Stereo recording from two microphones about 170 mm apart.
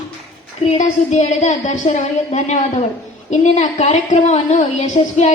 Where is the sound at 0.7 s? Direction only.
40° left (ahead or behind).